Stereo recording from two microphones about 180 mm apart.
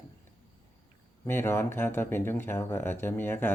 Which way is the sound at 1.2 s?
10° left (ahead or behind).